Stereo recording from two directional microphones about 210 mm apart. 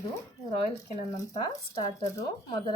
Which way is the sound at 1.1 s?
20° left (ahead or behind).